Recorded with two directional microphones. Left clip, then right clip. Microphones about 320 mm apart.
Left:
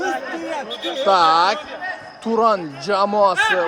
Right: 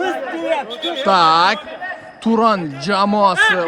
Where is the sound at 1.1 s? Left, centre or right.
Right.